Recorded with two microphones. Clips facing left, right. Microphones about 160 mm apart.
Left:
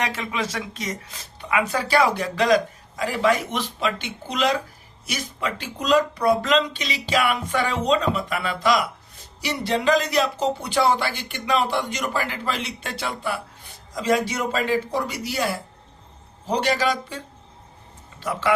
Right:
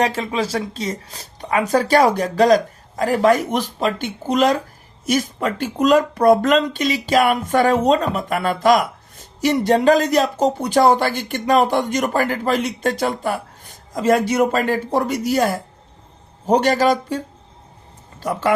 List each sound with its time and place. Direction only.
0.0 s speech: 35° right (ahead or behind)